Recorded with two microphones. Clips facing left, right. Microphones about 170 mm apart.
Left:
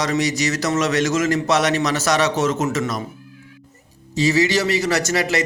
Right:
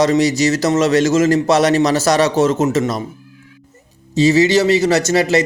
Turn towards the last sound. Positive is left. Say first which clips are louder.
# right 6 dB
turn(degrees=-25)  # may be behind; listen again after turning